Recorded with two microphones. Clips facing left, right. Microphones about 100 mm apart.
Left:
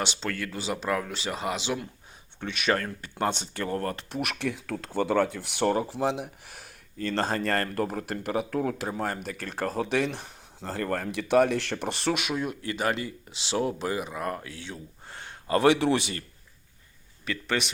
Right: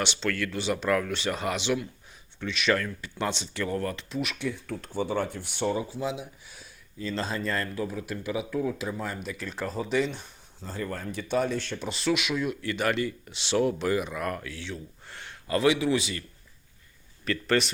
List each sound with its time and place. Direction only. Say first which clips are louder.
0.3 s speech: right 3 dB; 25° left (ahead or behind)
2.4 s speech: right 1 dB; 50° left (ahead or behind)
4.1 s speech: left 1 dB; 65° left (ahead or behind)
9.7 s speech: right 1 dB; 70° left (ahead or behind); by 12.3 s 50° left (ahead or behind)
12.3 s speech: right 1 dB; 35° left (ahead or behind)
12.8 s speech: right 1 dB; 25° left (ahead or behind)
14.6 s a sound: right 2 dB; 35° left (ahead or behind)
15.7 s speech: left 2 dB; 55° left (ahead or behind)
17.2 s a man's voice: right 4 dB; 15° left (ahead or behind)